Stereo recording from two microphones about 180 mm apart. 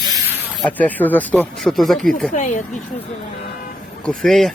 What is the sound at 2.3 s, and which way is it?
Speech, 45° left (ahead or behind).